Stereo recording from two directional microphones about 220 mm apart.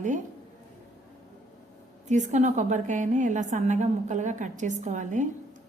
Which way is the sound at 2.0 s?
35° right (ahead or behind).